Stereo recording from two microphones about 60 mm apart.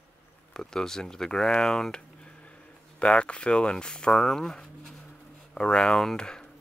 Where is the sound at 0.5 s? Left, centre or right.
Centre.